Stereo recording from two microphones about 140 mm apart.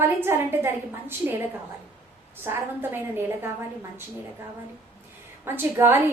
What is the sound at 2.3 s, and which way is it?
A woman's voice, 15° right (ahead or behind).